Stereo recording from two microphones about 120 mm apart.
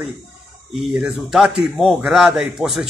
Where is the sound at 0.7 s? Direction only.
5° right (ahead or behind).